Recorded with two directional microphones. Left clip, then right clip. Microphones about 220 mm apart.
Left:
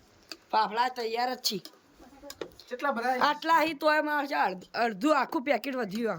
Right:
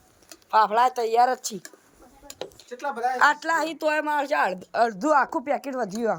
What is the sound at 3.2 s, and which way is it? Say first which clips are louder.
Speech: right 5 dB; centre (ahead or behind).